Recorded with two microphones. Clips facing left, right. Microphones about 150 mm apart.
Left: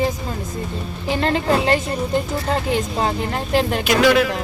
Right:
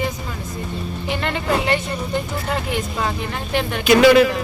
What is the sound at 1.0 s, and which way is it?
Speech, 35° left (ahead or behind).